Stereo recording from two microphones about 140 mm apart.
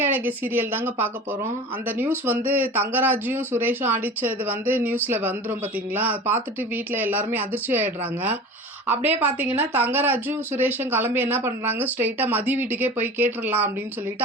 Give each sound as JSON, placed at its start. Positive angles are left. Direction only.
{"t": 0.0, "sound": "speech", "side_deg": -15}